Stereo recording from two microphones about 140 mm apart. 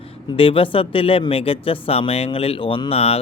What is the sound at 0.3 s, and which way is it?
Speech, 40° left (ahead or behind).